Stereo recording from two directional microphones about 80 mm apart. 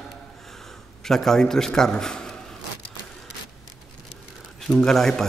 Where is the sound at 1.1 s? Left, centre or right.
Centre.